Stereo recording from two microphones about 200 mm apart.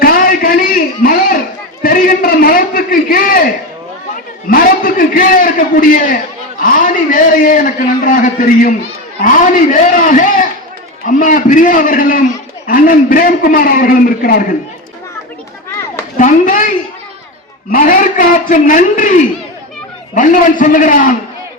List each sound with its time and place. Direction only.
0.0 s a sound: 45° left (ahead or behind)
1.8 s a man's voice: 45° left (ahead or behind)
16.1 s a man's voice: 40° left (ahead or behind)